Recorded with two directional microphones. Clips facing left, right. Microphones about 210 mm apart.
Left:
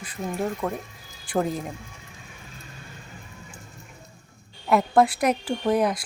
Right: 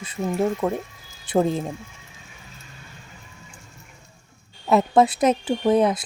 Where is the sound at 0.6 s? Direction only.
25° right (ahead or behind).